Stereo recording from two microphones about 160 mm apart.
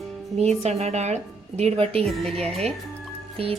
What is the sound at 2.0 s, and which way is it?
Speech, centre (ahead or behind).